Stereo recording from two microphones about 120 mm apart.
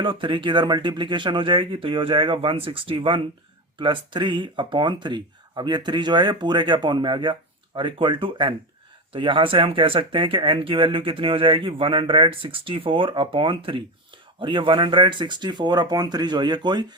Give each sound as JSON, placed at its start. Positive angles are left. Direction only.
{"t": 0.0, "sound": "speech", "side_deg": -45}